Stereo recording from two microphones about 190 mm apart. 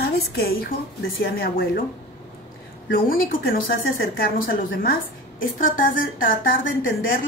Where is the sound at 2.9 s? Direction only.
50° left (ahead or behind).